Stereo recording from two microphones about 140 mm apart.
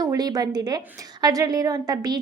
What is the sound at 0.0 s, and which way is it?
A woman's voice, 25° right (ahead or behind).